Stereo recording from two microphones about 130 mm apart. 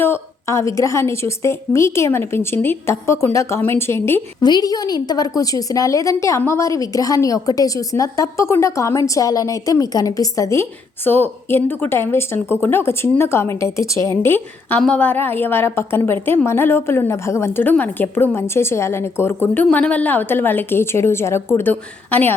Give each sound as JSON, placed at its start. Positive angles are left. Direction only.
{"t": 0.0, "sound": "a woman's voice", "side_deg": 20}
{"t": 4.4, "sound": "a woman's voice", "side_deg": 30}